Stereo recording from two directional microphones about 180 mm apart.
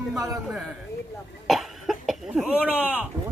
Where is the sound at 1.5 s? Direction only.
Centre (ahead or behind).